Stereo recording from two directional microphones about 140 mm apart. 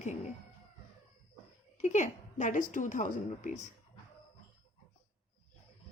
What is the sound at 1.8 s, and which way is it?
A woman's voice, 60° left (ahead or behind).